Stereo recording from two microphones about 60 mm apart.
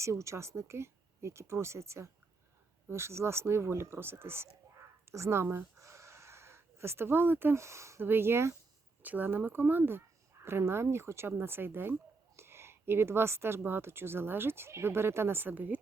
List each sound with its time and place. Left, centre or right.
0.0 s speech: right
7.5 s speech: right
8.0 s speech: right
9.0 s a woman's voice: right